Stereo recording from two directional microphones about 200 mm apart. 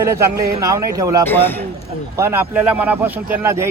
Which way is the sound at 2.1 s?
10° right (ahead or behind).